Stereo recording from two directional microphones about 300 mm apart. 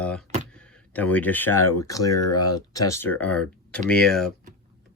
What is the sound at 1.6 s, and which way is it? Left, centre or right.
Speech, centre.